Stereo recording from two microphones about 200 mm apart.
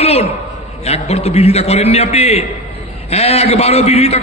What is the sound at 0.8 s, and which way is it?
A man's voice, 30° left (ahead or behind).